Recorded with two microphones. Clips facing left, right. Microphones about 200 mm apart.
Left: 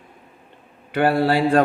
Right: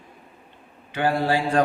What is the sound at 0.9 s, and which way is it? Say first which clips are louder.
Speech: left 4 dB; 65° left (ahead or behind).